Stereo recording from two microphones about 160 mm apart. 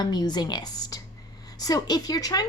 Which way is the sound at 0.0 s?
25° left (ahead or behind).